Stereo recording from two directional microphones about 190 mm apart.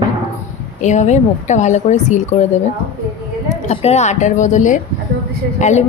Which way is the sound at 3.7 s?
35° left (ahead or behind).